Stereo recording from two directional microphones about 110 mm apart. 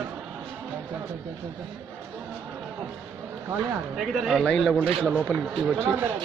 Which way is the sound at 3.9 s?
Centre (ahead or behind).